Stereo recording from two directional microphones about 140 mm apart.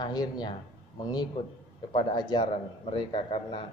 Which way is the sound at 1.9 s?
30° left (ahead or behind).